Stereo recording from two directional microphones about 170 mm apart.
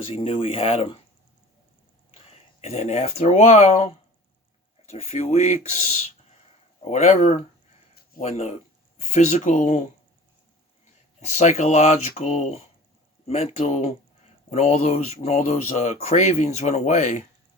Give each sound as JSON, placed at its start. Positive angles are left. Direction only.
{"t": 0.0, "sound": "speech", "side_deg": 30}
{"t": 2.1, "sound": "speech", "side_deg": 40}
{"t": 6.8, "sound": "speech", "side_deg": 40}
{"t": 11.2, "sound": "speech", "side_deg": 45}